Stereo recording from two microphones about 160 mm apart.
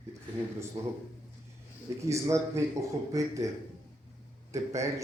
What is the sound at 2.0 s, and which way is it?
Speech, 20° right (ahead or behind).